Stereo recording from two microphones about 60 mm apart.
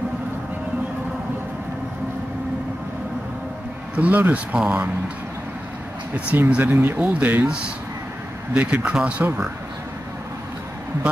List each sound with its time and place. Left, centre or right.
3.9 s a man's voice: right
6.1 s a man's voice: right
8.5 s a man's voice: right
9.2 s speech: right